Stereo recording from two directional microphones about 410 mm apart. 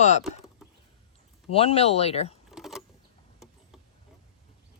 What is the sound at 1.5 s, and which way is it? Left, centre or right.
Speech, centre.